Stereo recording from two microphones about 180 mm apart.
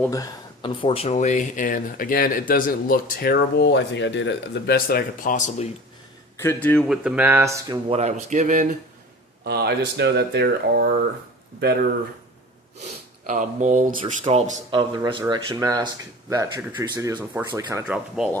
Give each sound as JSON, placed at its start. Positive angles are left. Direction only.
{"t": 0.0, "sound": "speech", "side_deg": 20}
{"t": 6.3, "sound": "speech", "side_deg": 15}
{"t": 6.8, "sound": "speech", "side_deg": -5}
{"t": 7.9, "sound": "speech", "side_deg": -35}
{"t": 9.4, "sound": "speech", "side_deg": -65}
{"t": 12.8, "sound": "speech", "side_deg": -45}
{"t": 14.0, "sound": "speech", "side_deg": -30}
{"t": 17.8, "sound": "speech", "side_deg": -5}